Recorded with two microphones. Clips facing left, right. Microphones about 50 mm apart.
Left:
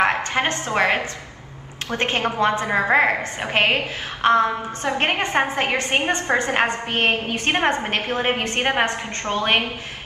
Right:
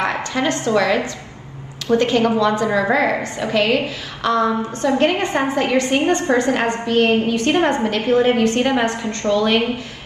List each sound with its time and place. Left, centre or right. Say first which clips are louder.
0.0 s a woman's voice: even; left